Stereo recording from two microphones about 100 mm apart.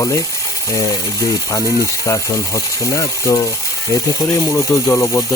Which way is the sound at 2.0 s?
30° left (ahead or behind).